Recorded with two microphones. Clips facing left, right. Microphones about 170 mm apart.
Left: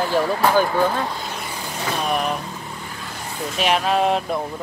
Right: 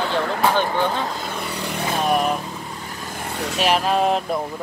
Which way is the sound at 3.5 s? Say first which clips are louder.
Even; centre (ahead or behind).